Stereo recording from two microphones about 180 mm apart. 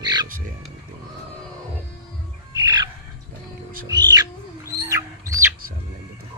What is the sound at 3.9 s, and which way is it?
Bird, 25° right (ahead or behind).